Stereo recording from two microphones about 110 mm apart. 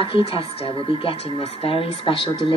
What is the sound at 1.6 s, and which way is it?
Speech, 55° left (ahead or behind).